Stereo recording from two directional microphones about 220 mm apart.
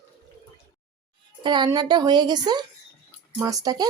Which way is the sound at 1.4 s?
20° right (ahead or behind).